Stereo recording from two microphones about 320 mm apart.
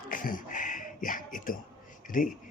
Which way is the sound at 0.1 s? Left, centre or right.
Left.